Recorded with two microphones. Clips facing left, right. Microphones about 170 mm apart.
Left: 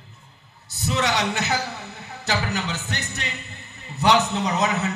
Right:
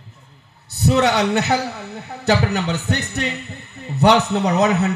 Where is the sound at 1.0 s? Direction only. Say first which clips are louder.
Right 6 dB; 60° right (ahead or behind).